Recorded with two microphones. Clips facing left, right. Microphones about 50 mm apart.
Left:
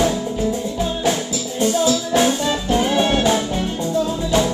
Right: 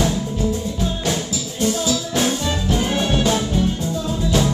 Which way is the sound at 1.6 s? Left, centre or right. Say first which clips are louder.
Left 3 dB; centre.